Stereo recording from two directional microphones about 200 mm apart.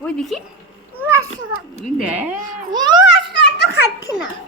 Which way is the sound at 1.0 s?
15° right (ahead or behind).